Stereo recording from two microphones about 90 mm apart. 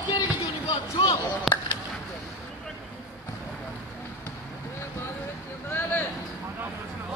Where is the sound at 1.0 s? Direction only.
45° left (ahead or behind).